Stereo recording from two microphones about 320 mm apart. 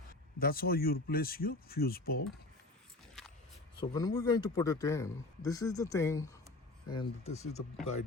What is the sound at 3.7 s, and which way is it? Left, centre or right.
A man's voice, centre.